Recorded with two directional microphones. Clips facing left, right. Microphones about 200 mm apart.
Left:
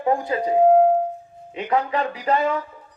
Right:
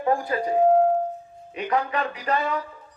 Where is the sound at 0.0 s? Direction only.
20° left (ahead or behind).